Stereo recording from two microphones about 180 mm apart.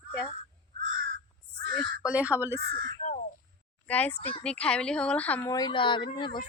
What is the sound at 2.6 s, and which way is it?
Speech, 60° right (ahead or behind).